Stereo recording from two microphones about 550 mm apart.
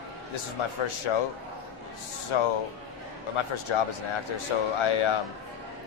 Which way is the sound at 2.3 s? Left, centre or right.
Left.